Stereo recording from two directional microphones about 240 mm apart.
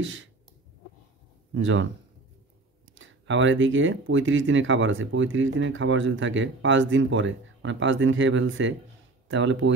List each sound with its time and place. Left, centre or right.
0.0 s speech: right
1.5 s speech: right
2.9 s speech: right